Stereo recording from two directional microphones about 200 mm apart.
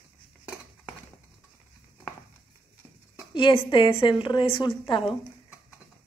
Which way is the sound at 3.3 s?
25° left (ahead or behind).